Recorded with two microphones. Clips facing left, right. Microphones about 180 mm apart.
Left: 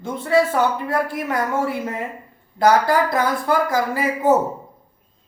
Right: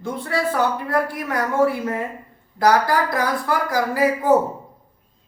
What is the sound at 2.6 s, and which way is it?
Speech, 25° left (ahead or behind).